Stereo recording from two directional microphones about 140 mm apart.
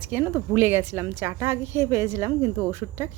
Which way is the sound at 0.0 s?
15° right (ahead or behind).